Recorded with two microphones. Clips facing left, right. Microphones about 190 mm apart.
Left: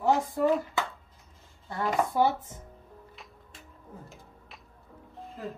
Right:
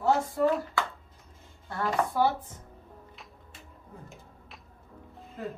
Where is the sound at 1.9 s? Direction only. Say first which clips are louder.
Left 1 dB; 20° left (ahead or behind).